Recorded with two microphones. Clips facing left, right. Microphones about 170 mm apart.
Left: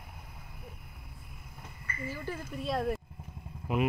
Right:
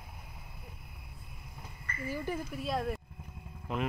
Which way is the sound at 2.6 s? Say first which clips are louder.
Left 4 dB; centre (ahead or behind).